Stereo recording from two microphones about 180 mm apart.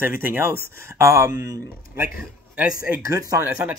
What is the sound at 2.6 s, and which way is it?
Speech, 50° left (ahead or behind).